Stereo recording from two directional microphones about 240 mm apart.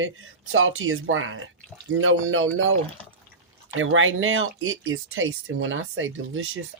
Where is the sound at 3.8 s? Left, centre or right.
Right.